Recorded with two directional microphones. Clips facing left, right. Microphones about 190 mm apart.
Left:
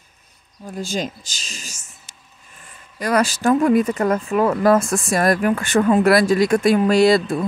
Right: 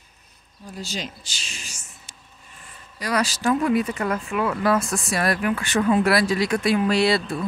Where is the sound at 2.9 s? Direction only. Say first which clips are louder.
Left 5 dB; 50° left (ahead or behind).